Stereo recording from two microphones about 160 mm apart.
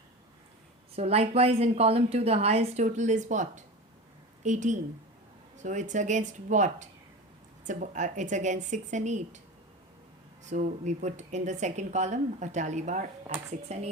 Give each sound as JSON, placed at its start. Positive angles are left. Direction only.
{"t": 0.9, "sound": "a woman's voice", "side_deg": -40}
{"t": 10.4, "sound": "speech", "side_deg": -50}